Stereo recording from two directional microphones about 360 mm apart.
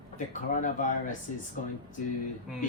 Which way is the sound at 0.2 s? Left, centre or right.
Left.